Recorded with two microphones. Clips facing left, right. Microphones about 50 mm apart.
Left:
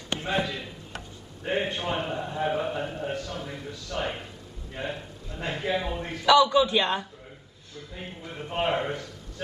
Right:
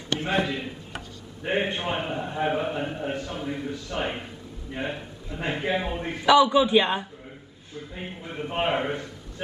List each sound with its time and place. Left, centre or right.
0.2 s a man's voice: right